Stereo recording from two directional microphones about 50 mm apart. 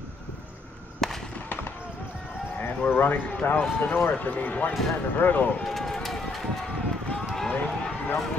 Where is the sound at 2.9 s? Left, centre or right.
Left.